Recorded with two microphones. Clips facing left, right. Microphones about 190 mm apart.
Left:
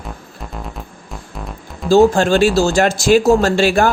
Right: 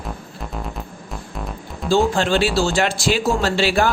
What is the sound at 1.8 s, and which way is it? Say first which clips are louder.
Speech: left 7 dB; 45° left (ahead or behind).